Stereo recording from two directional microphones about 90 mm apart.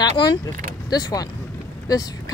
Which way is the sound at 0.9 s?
45° left (ahead or behind).